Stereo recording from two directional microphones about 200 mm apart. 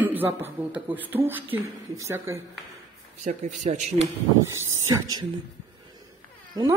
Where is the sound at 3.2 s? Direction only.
35° right (ahead or behind).